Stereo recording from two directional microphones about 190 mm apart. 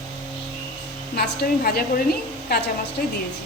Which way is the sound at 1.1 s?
55° left (ahead or behind).